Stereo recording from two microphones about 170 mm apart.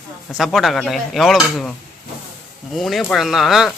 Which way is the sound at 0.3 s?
Centre (ahead or behind).